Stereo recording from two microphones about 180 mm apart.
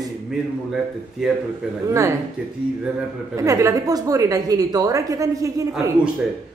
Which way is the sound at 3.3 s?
15° right (ahead or behind).